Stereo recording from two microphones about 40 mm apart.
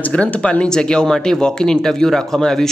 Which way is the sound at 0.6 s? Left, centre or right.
Centre.